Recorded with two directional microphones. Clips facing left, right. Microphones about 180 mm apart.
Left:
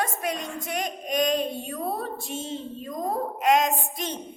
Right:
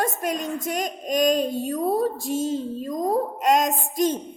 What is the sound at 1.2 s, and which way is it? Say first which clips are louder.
A woman's voice: right 5 dB; 40° right (ahead or behind).